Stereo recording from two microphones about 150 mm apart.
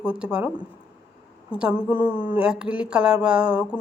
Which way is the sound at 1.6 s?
10° right (ahead or behind).